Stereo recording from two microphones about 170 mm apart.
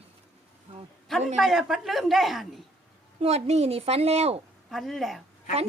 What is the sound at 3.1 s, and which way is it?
A woman's voice, 40° right (ahead or behind).